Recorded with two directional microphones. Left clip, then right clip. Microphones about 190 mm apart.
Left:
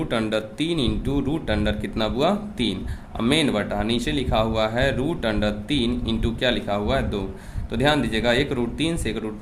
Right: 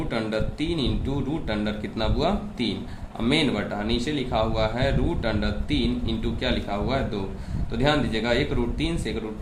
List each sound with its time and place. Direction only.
0.1 s speech: 45° left (ahead or behind)